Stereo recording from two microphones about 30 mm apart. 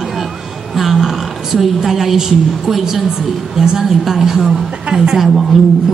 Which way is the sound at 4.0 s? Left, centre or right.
Centre.